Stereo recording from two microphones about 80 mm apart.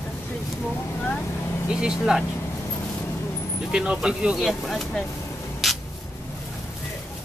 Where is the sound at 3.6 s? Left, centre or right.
Centre.